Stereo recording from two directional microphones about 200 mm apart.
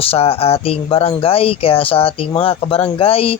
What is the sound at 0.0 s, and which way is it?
Speech, 30° left (ahead or behind).